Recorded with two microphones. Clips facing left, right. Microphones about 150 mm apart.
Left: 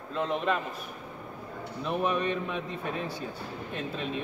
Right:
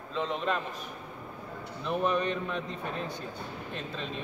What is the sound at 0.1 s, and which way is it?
Speech, 5° left (ahead or behind).